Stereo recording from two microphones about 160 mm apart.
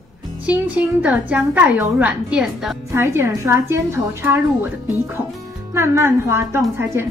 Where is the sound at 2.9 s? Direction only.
15° right (ahead or behind).